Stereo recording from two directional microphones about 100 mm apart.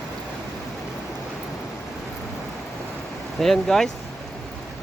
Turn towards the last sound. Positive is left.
turn(degrees=5)  # may be behind; listen again after turning